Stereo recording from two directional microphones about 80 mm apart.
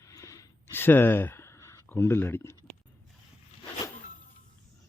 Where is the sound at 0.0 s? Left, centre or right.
Left.